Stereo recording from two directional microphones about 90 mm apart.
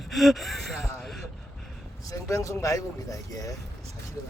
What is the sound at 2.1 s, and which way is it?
Speech, 35° left (ahead or behind).